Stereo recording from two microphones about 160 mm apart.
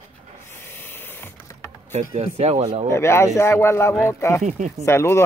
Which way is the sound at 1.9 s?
45° right (ahead or behind).